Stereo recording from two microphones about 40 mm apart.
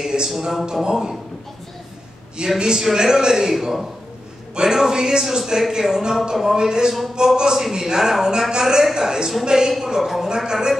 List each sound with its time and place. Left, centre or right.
0.0 s a man's voice: centre
2.5 s a man's voice: centre